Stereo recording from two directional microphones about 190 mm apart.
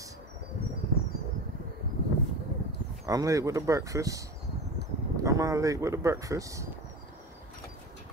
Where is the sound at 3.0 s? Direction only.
20° right (ahead or behind).